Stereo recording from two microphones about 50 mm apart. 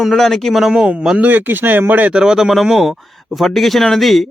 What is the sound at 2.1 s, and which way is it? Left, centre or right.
Speech, centre.